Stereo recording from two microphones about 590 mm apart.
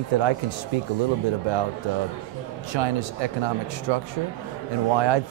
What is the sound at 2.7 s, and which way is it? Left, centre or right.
Speech, right.